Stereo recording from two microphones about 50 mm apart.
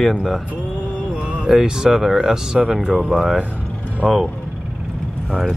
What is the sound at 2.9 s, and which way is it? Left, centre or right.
Speech, centre.